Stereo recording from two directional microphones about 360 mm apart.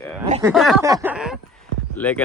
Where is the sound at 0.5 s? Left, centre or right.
Centre.